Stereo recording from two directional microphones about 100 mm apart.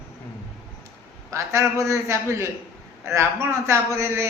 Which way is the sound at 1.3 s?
30° right (ahead or behind).